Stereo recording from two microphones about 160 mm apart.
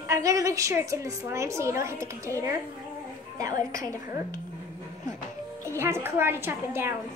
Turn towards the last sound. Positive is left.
turn(degrees=-15)  # may be behind; listen again after turning